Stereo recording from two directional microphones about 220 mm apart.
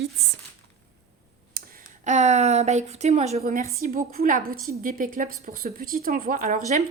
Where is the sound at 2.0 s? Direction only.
30° right (ahead or behind).